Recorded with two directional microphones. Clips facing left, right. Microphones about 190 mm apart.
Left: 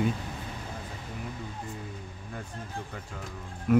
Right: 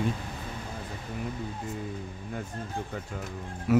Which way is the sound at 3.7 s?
5° right (ahead or behind).